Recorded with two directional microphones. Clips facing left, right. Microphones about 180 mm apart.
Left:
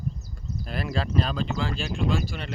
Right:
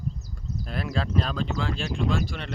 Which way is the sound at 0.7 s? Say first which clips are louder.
Even; centre (ahead or behind).